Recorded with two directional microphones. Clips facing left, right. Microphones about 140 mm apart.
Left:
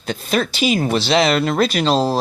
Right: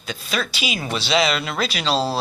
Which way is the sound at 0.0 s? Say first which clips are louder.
Left 6 dB; 55° left (ahead or behind).